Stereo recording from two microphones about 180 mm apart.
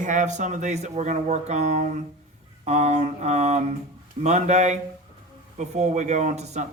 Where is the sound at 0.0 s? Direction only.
45° right (ahead or behind).